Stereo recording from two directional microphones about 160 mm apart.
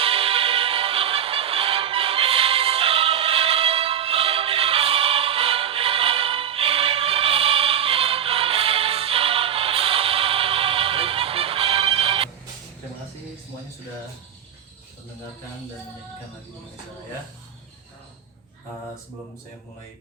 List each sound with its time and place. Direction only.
0.0 s music: 35° right (ahead or behind)